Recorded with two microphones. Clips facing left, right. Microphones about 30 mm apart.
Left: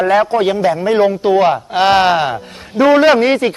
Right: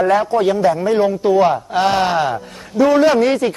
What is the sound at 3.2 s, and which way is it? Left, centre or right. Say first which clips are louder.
Speech: left 2 dB; left.